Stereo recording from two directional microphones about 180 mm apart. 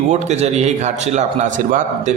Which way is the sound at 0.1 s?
40° right (ahead or behind).